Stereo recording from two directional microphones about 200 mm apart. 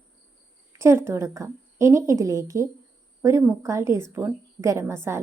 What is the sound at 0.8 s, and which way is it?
A woman's voice, 15° right (ahead or behind).